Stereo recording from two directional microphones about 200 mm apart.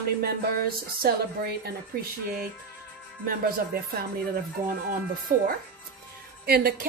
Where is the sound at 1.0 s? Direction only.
50° right (ahead or behind).